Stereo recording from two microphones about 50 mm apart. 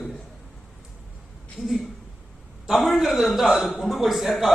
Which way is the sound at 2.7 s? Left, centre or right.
Centre.